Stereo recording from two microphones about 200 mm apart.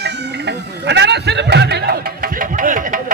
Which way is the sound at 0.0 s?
60° right (ahead or behind).